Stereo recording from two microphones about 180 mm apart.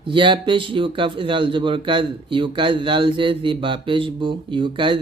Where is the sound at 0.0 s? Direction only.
25° right (ahead or behind).